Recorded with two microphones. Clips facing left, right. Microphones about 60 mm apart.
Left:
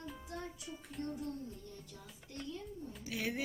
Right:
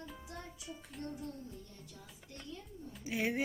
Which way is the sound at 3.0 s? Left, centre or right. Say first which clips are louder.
Right 4 dB; right.